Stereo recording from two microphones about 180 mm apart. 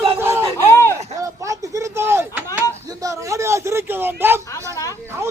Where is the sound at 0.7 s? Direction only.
15° left (ahead or behind).